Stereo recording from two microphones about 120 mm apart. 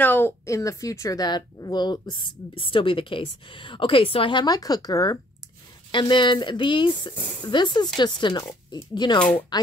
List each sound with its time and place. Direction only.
0.0 s a woman's voice: 15° left (ahead or behind)
5.9 s a woman's voice: 40° left (ahead or behind)